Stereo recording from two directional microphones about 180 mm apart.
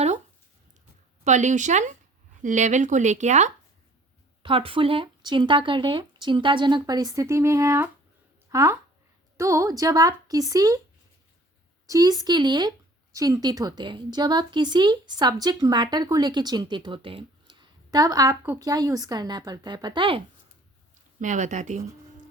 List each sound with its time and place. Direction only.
1.2 s speech: 40° right (ahead or behind)
4.4 s speech: 30° right (ahead or behind)
11.9 s speech: 20° right (ahead or behind)
21.2 s speech: 45° right (ahead or behind)